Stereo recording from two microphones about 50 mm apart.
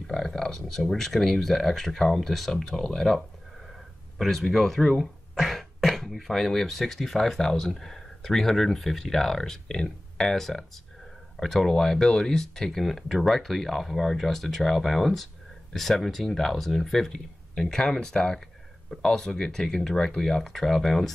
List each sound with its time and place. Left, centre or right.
0.0 s speech: centre
4.2 s speech: centre